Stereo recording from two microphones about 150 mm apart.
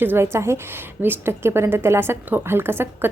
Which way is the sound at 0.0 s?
15° right (ahead or behind).